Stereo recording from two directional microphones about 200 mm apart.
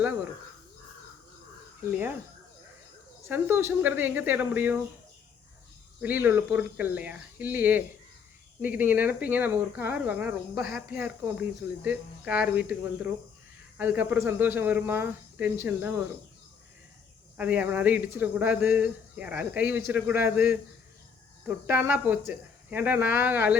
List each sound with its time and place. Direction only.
1.8 s speech: 10° right (ahead or behind)
3.2 s speech: 10° right (ahead or behind)
6.0 s speech: 10° right (ahead or behind)
13.7 s speech: 10° right (ahead or behind)
17.3 s speech: 5° right (ahead or behind)